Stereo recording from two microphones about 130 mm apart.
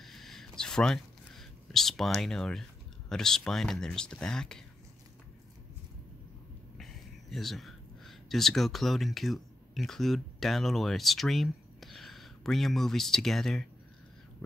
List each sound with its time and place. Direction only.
0.0 s a sound: centre (ahead or behind)
3.1 s speech: 5° left (ahead or behind)
6.8 s speech: centre (ahead or behind)